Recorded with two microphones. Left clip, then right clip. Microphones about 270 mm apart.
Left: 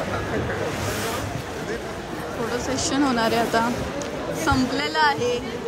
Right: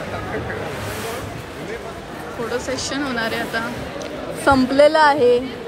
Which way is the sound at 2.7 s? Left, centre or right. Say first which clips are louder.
Left 1 dB; centre.